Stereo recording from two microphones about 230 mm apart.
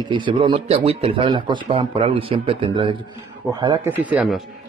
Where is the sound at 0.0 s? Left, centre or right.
Right.